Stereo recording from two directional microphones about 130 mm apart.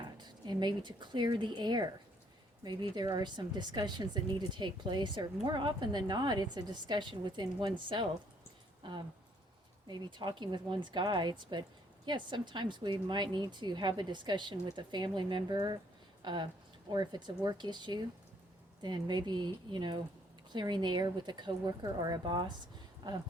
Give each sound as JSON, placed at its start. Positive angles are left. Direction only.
{"t": 0.2, "sound": "speech", "side_deg": -35}